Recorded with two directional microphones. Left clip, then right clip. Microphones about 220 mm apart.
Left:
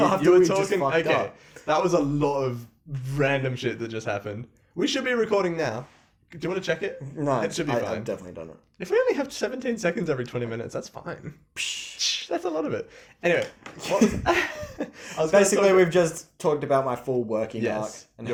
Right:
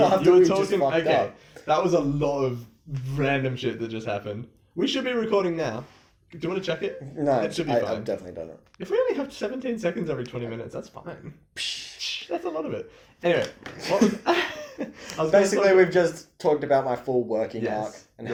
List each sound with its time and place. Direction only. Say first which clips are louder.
0.0 s speech: right 1 dB; 40° left (ahead or behind)